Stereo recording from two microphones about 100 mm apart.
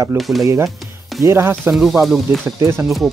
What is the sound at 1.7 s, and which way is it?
Speech, 5° right (ahead or behind).